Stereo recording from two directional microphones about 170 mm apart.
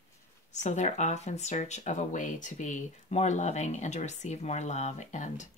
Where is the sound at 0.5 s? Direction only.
40° left (ahead or behind).